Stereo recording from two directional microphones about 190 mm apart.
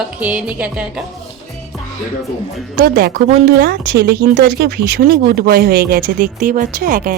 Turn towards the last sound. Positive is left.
turn(degrees=-45)  # may be behind; listen again after turning